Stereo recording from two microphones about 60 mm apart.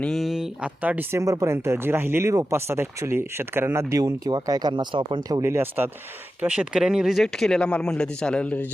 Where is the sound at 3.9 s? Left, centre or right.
Right.